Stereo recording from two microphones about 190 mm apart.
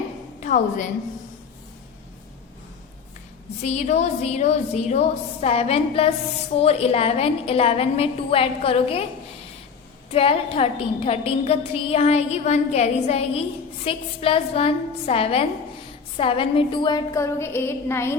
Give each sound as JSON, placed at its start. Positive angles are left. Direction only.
{"t": 0.3, "sound": "a woman's voice", "side_deg": 40}
{"t": 3.6, "sound": "a woman's voice", "side_deg": 35}
{"t": 10.1, "sound": "a woman's voice", "side_deg": 30}